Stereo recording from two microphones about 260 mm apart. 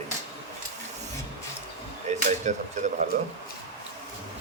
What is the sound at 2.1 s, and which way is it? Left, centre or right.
Speech, right.